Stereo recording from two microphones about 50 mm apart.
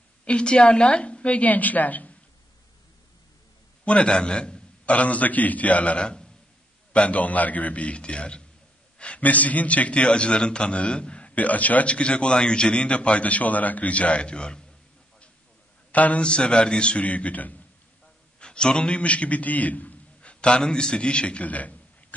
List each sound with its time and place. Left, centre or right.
0.2 s a man's voice: left
3.8 s a man's voice: left
4.9 s a man's voice: left
8.9 s a sound: left
9.2 s a man's voice: left
15.9 s a man's voice: left
18.4 s a man's voice: centre